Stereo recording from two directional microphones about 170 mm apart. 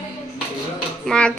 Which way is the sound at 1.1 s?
5° left (ahead or behind).